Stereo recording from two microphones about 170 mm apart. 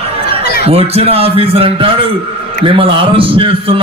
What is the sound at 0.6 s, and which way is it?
A man's voice, 35° right (ahead or behind).